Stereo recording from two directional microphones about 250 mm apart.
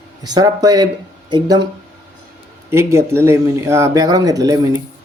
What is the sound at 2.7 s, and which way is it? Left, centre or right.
Speech, centre.